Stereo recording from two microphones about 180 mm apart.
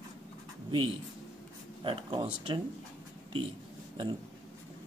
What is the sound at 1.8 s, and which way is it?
Speech, 25° right (ahead or behind).